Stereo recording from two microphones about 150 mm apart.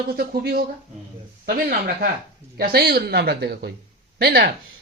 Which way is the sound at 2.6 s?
90° right.